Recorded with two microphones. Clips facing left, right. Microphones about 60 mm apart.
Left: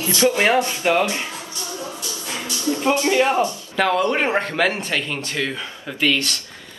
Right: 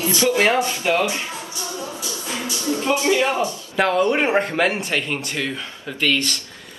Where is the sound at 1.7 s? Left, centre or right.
Right.